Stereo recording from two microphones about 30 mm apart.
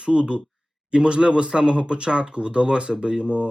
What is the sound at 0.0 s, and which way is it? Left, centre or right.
Speech, right.